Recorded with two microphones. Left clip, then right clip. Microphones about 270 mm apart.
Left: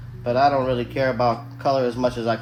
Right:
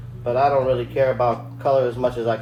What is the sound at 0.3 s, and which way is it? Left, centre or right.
Speech, left.